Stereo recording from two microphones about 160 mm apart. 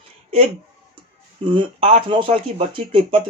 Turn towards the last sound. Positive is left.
turn(degrees=-35)  # may be behind; listen again after turning